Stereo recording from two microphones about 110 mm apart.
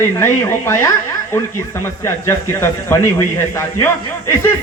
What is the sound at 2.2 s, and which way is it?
Speech, 20° left (ahead or behind).